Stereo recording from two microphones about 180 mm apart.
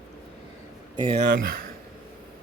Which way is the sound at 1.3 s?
55° right (ahead or behind).